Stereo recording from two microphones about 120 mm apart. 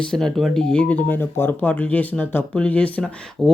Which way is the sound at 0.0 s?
5° left (ahead or behind).